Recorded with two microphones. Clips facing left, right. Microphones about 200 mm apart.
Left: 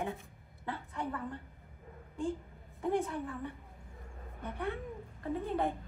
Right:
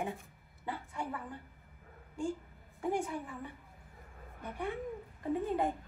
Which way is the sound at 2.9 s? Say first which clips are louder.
Left 2 dB; 10° right (ahead or behind).